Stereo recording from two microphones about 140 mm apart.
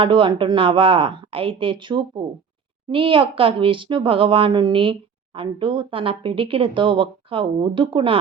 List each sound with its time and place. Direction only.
0.0 s speech: 35° right (ahead or behind)